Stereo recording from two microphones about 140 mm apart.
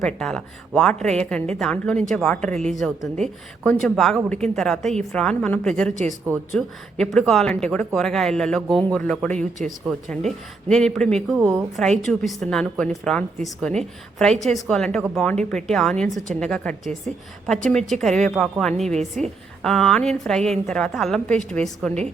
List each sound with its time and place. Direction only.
0.0 s a woman's voice: 5° left (ahead or behind)
2.6 s a woman's voice: 55° right (ahead or behind)
3.2 s a woman's voice: 5° left (ahead or behind)